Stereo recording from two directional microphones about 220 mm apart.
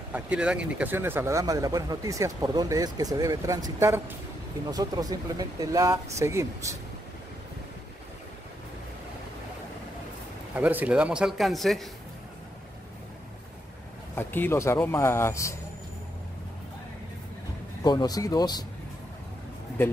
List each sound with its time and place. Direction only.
0.1 s speech: 5° right (ahead or behind)
10.5 s a man's voice: 5° right (ahead or behind)
14.1 s speech: 10° left (ahead or behind)
17.8 s speech: 15° left (ahead or behind)